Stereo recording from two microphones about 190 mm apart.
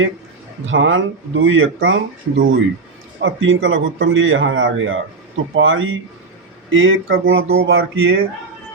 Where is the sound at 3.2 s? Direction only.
90° right.